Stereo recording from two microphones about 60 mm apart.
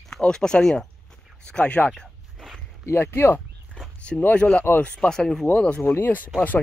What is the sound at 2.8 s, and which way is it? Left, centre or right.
Speech, left.